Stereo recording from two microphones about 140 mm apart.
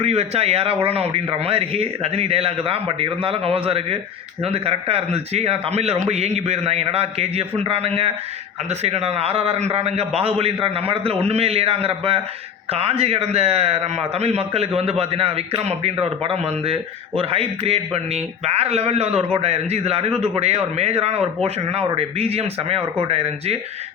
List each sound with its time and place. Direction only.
0.0 s a man's voice: 45° right (ahead or behind)